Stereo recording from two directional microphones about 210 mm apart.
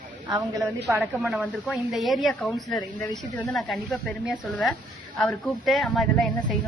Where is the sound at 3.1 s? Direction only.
15° left (ahead or behind).